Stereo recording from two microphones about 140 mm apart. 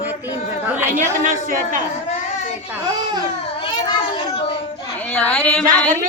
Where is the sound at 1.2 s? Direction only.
70° right (ahead or behind).